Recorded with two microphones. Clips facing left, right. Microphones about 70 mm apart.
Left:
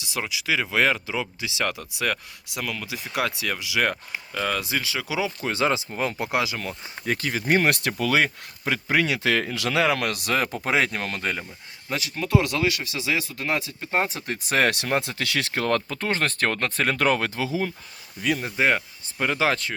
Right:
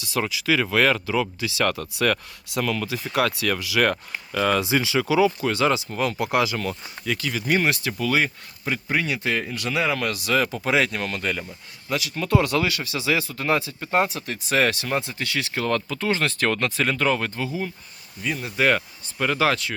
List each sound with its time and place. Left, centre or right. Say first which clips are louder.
0.0 s speech: right 4 dB; centre
5.0 s speech: right 8 dB; centre
5.5 s speech: right 2 dB; left
7.0 s speech: left 1 dB; left
7.8 s speech: left 1 dB; left
11.2 s speech: right 1 dB; centre
11.9 s speech: right 3 dB; left
12.1 s speech: right 2 dB; centre
14.1 s speech: right 1 dB; left
14.6 s speech: left 1 dB; left
15.0 s speech: left 1 dB; left
15.5 s speech: even; left
18.5 s speech: right 6 dB; centre